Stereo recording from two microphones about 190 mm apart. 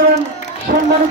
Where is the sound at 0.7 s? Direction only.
45° right (ahead or behind).